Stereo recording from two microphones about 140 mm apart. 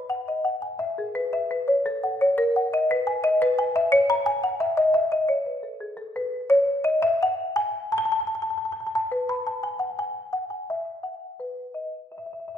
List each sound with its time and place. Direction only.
0.3 s music: 15° left (ahead or behind)